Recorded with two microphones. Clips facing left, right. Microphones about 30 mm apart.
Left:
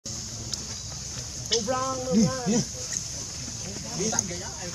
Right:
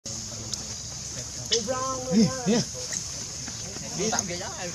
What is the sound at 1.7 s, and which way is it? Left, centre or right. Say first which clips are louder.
Speech: left 1 dB; left.